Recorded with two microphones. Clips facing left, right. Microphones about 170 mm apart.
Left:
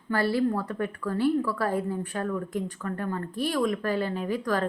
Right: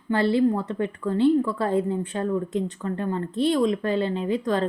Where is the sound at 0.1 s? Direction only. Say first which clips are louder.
Right 4 dB; 20° right (ahead or behind).